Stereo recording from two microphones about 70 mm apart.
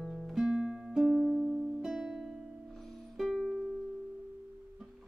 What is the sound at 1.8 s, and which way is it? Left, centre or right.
Music, centre.